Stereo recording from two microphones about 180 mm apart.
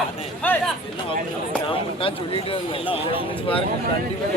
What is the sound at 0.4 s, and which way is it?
Speech, 10° left (ahead or behind).